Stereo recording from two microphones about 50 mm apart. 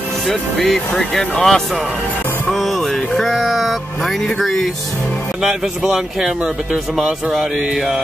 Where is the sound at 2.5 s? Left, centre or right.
Centre.